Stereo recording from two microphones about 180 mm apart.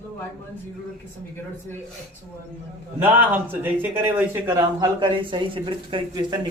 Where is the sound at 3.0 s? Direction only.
10° right (ahead or behind).